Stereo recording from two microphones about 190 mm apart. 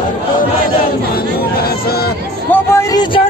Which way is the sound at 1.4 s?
55° left (ahead or behind).